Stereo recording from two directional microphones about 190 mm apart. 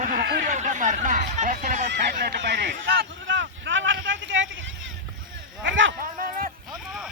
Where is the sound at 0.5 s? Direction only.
40° right (ahead or behind).